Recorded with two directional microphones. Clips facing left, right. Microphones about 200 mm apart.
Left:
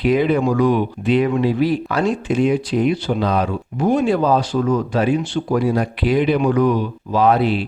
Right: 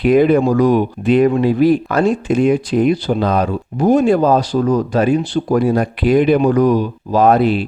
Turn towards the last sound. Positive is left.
turn(degrees=-45)  # may be behind; listen again after turning